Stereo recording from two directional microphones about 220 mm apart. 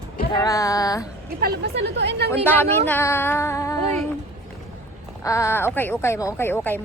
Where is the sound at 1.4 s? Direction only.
45° right (ahead or behind).